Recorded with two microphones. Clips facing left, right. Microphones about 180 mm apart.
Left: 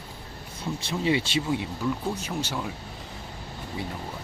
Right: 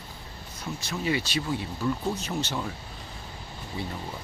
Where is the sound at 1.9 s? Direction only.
5° left (ahead or behind).